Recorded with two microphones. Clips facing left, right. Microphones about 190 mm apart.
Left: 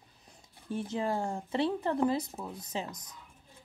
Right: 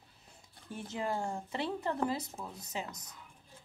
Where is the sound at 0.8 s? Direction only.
20° left (ahead or behind).